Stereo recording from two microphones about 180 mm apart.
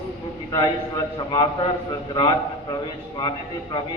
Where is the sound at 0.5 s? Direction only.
20° left (ahead or behind).